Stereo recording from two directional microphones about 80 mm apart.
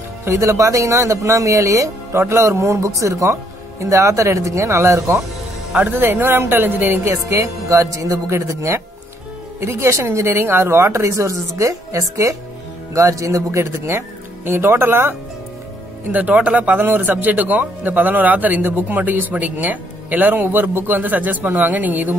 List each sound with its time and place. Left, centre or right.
0.2 s speech: right
5.7 s a man's voice: right
7.1 s a man's voice: right